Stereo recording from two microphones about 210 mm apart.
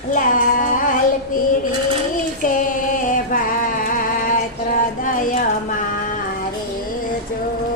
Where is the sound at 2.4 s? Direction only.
40° left (ahead or behind).